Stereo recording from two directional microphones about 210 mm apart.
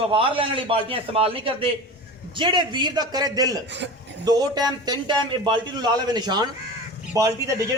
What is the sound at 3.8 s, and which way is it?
Speech, 60° right (ahead or behind).